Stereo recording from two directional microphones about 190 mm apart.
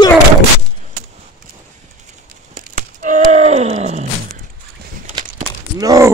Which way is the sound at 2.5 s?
40° right (ahead or behind).